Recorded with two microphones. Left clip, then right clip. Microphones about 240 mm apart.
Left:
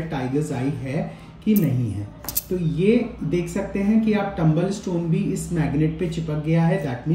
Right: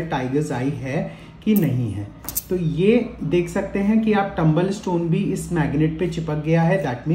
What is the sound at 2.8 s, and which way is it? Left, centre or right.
Speech, centre.